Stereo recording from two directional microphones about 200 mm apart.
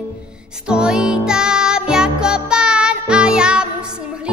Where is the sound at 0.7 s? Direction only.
5° right (ahead or behind).